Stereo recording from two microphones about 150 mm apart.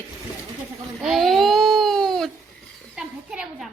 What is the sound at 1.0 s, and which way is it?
Speech, centre (ahead or behind).